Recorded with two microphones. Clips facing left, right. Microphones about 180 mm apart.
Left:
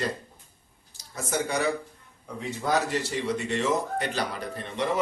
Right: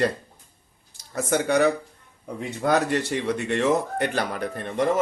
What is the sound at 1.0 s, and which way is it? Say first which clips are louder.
A man's voice: right 5 dB; 60° right (ahead or behind).